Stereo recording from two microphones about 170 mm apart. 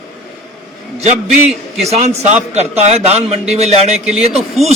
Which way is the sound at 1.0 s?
40° right (ahead or behind).